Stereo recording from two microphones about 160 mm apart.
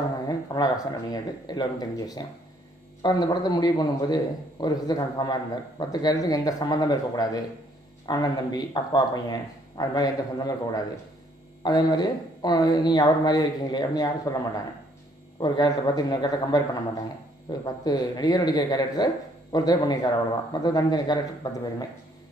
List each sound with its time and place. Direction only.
0.3 s a man's voice: 25° left (ahead or behind)